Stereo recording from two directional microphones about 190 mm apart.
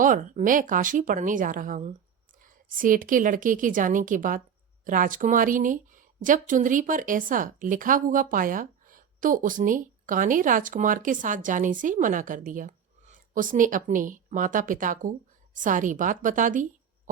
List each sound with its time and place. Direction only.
0.0 s a woman's voice: 45° right (ahead or behind)